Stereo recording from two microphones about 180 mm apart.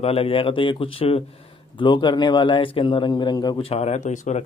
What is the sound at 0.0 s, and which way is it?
A man's voice, 35° left (ahead or behind).